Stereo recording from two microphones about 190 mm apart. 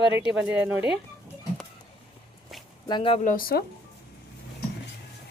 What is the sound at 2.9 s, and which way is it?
Speech, 25° left (ahead or behind).